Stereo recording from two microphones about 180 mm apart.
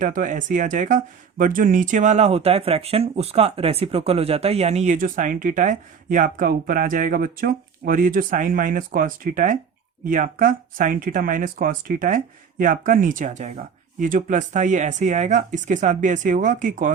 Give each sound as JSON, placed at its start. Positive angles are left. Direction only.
{"t": 0.0, "sound": "speech", "side_deg": -45}